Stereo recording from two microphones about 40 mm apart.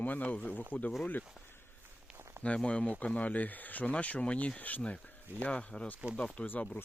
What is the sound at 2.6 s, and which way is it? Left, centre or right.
Speech, left.